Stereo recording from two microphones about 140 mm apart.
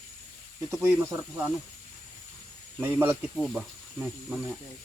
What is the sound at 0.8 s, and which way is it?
Speech, 15° right (ahead or behind).